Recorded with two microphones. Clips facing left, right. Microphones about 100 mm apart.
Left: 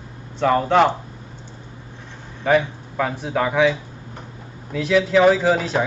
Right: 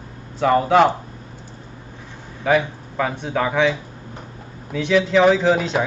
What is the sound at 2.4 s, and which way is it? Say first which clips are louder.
A man's voice: even; centre (ahead or behind).